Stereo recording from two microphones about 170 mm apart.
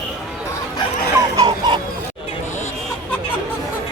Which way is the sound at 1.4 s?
25° right (ahead or behind).